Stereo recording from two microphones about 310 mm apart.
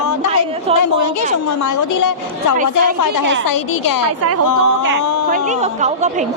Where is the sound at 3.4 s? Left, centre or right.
Left.